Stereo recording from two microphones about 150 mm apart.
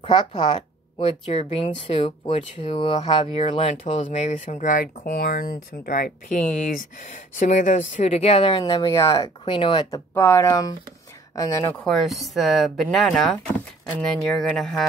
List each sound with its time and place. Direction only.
0.0 s speech: 30° left (ahead or behind)
3.4 s speech: 45° left (ahead or behind); by 6.0 s 70° left (ahead or behind)
7.3 s speech: 55° left (ahead or behind); by 9.3 s 25° left (ahead or behind)
9.4 s speech: 35° left (ahead or behind)
10.1 s speech: 15° left (ahead or behind)
11.8 s speech: centre (ahead or behind)